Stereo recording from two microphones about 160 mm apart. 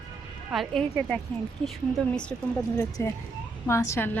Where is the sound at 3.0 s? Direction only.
20° left (ahead or behind).